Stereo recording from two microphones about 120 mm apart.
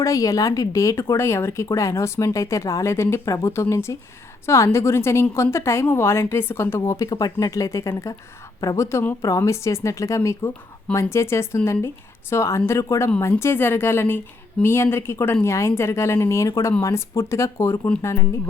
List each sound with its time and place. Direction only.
0.0 s speech: 30° left (ahead or behind)